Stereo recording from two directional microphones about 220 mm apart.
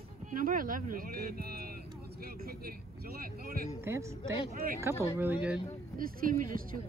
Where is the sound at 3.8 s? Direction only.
10° right (ahead or behind).